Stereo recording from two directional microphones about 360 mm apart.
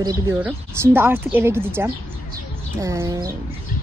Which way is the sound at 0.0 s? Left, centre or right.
Centre.